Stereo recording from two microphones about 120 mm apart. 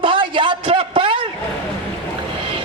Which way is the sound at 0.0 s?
45° right (ahead or behind).